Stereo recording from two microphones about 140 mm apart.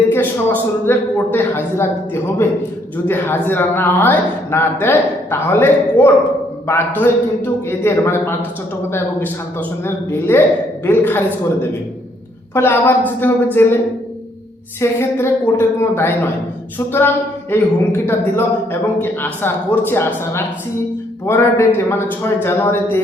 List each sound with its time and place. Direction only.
0.1 s a woman's voice: 15° left (ahead or behind)
12.5 s a woman's voice: 15° left (ahead or behind)
14.8 s a woman's voice: 20° left (ahead or behind)